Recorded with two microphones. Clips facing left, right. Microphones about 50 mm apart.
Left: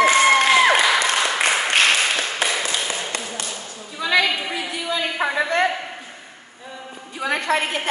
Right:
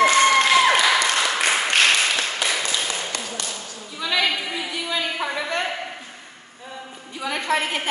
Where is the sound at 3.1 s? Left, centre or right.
Left.